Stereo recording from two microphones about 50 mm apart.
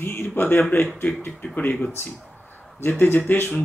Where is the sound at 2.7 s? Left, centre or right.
Left.